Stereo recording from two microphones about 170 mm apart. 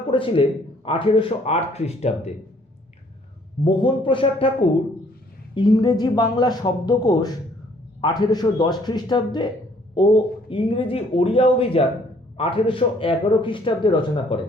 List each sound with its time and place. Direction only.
0.1 s a man's voice: 30° left (ahead or behind)
3.6 s speech: 30° left (ahead or behind)
5.5 s speech: 25° left (ahead or behind)